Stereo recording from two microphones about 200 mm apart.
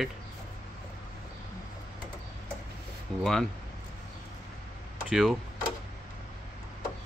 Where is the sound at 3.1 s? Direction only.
5° left (ahead or behind).